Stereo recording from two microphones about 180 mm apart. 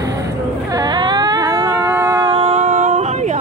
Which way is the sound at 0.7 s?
25° right (ahead or behind).